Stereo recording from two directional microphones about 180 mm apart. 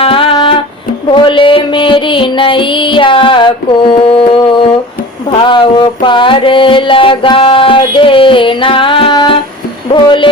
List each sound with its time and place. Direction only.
0.0 s music: 30° left (ahead or behind)